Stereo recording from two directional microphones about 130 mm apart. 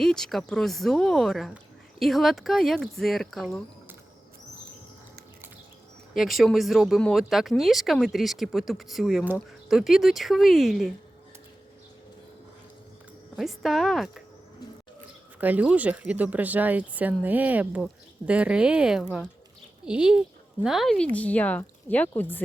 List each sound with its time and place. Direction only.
0.0 s speech: 5° left (ahead or behind)
6.1 s speech: centre (ahead or behind)
13.3 s speech: centre (ahead or behind)
15.4 s speech: 15° right (ahead or behind); by 22.4 s 15° left (ahead or behind)